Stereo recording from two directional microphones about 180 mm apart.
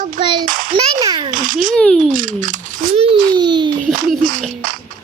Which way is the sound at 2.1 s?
45° right (ahead or behind).